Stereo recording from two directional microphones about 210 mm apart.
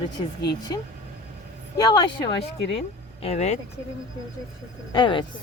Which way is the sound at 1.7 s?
20° left (ahead or behind).